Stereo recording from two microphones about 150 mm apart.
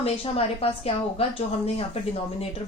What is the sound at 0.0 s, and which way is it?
A woman's voice, 40° left (ahead or behind).